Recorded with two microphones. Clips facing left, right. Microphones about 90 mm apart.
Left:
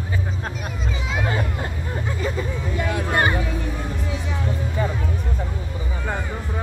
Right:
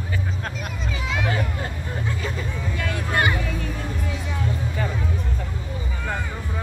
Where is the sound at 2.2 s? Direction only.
15° left (ahead or behind).